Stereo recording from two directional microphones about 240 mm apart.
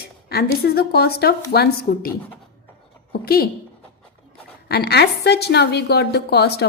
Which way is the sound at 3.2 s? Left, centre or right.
Left.